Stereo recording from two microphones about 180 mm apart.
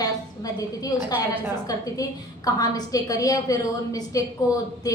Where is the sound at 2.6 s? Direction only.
20° left (ahead or behind).